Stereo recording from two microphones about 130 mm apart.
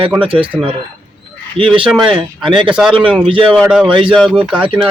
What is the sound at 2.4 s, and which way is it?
Speech, 40° right (ahead or behind).